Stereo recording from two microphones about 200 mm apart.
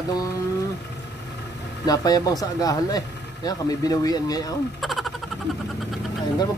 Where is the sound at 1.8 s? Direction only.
20° left (ahead or behind).